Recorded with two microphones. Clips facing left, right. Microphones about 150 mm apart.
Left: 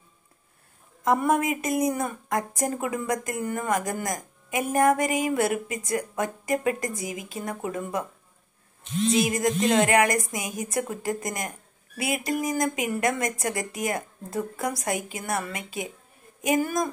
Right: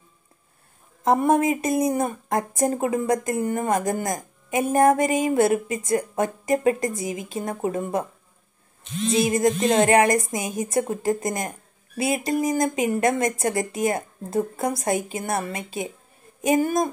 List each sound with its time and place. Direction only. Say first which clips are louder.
1.0 s speech: right 4 dB; 25° right (ahead or behind)
9.1 s a woman's voice: right 5 dB; 25° right (ahead or behind)